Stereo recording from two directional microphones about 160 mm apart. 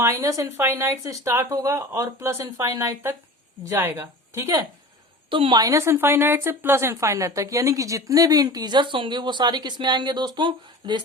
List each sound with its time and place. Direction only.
0.0 s a woman's voice: 20° right (ahead or behind)
5.3 s a woman's voice: 30° right (ahead or behind)